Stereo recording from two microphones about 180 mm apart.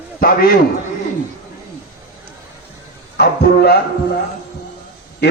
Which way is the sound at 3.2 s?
60° left (ahead or behind).